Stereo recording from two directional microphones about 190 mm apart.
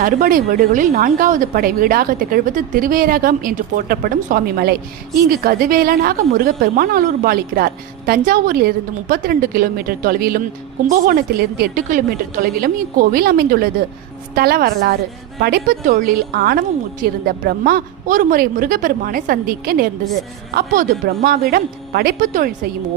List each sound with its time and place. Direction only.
0.0 s speech: 50° right (ahead or behind)